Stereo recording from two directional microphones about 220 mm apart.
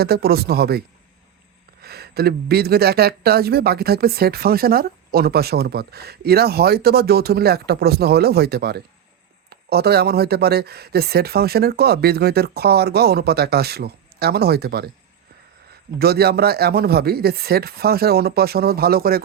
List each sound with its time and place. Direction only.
0.0 s speech: 45° right (ahead or behind)
16.0 s speech: 45° right (ahead or behind)